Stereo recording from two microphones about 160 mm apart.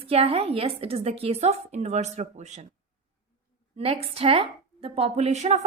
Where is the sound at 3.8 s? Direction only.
35° right (ahead or behind).